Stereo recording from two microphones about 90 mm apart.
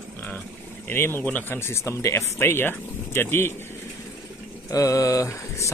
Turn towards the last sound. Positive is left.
turn(degrees=35)  # may be behind; listen again after turning